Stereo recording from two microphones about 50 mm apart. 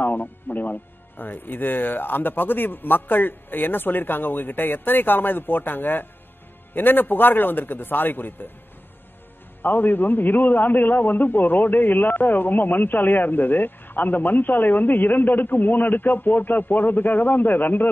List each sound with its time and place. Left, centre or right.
0.0 s a man's voice: left
9.6 s a man's voice: left